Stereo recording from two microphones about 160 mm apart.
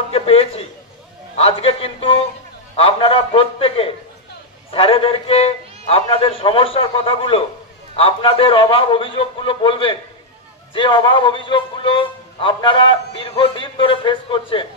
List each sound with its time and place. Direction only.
0.1 s a man's voice: 35° left (ahead or behind)